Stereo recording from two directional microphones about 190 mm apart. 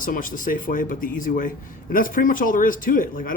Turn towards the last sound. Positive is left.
turn(degrees=45)  # may be behind; listen again after turning